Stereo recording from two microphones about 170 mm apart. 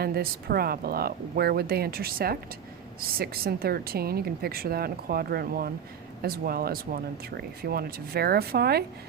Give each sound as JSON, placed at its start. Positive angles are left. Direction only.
{"t": 0.0, "sound": "speech", "side_deg": -65}